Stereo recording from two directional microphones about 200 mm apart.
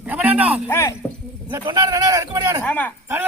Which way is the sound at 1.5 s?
20° right (ahead or behind).